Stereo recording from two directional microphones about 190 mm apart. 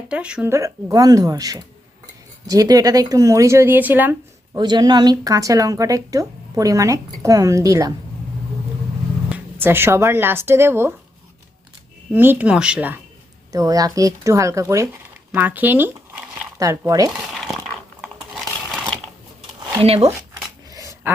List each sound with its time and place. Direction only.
0.1 s a woman's voice: 5° right (ahead or behind)
4.5 s speech: 20° right (ahead or behind)
9.3 s speech: 10° right (ahead or behind)
12.1 s speech: 10° right (ahead or behind)
13.5 s speech: 20° right (ahead or behind)
19.8 s speech: 30° right (ahead or behind)
20.7 s a sound: 15° right (ahead or behind)